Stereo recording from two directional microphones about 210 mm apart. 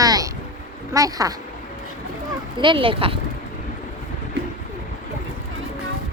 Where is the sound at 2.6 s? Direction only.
25° right (ahead or behind).